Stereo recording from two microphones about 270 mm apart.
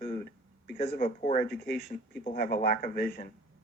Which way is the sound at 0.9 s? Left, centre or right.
Left.